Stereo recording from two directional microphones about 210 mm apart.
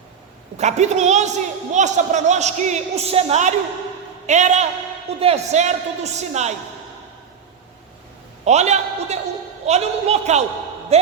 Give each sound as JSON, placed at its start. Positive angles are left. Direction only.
{"t": 0.5, "sound": "a man's voice", "side_deg": -30}
{"t": 8.4, "sound": "a man's voice", "side_deg": -30}